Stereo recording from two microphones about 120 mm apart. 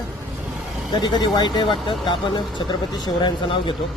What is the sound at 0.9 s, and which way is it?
Speech, 35° left (ahead or behind).